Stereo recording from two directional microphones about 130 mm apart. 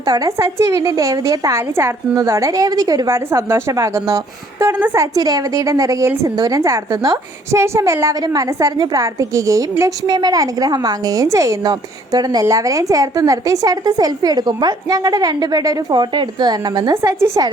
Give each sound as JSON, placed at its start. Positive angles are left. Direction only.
{"t": 0.0, "sound": "a woman's voice", "side_deg": -30}
{"t": 16.9, "sound": "a woman's voice", "side_deg": -20}